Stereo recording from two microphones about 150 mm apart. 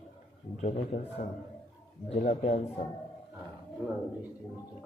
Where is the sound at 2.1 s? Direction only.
60° left (ahead or behind).